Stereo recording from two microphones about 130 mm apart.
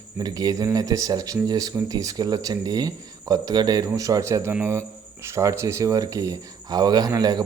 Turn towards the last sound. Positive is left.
turn(degrees=-30)  # may be behind; listen again after turning